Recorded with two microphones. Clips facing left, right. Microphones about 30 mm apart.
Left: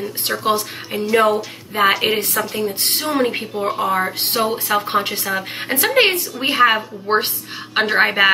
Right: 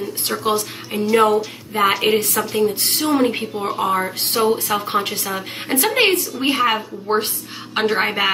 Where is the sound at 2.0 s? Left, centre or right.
Left.